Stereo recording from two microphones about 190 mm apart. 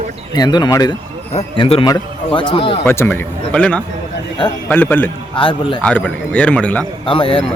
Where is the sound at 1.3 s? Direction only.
30° left (ahead or behind).